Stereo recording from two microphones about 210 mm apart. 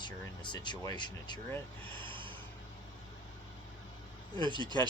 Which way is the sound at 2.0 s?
25° right (ahead or behind).